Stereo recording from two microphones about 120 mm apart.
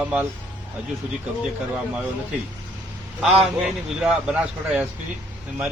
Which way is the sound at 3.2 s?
5° right (ahead or behind).